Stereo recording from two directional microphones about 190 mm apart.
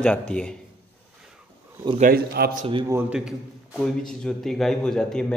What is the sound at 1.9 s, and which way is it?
Speech, 50° right (ahead or behind).